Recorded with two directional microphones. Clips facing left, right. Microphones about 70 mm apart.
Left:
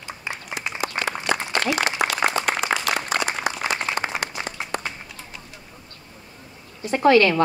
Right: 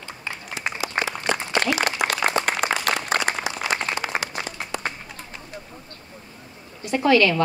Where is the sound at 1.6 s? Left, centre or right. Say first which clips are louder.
Right 2 dB; right.